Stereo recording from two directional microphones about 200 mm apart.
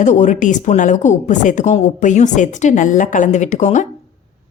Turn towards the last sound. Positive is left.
turn(degrees=35)  # may be behind; listen again after turning